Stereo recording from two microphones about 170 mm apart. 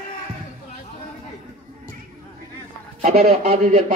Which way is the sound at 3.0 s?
55° right (ahead or behind).